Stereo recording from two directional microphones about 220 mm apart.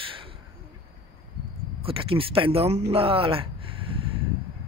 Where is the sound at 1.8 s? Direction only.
25° right (ahead or behind).